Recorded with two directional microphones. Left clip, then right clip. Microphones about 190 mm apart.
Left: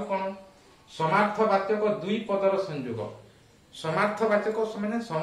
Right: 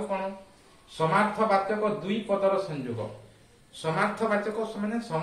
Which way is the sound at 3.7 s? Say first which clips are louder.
Left 1 dB; 20° left (ahead or behind).